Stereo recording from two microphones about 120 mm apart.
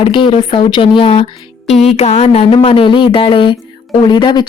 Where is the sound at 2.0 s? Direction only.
65° left (ahead or behind).